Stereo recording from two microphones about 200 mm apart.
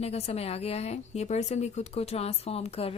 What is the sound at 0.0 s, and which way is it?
A woman's voice, 30° left (ahead or behind).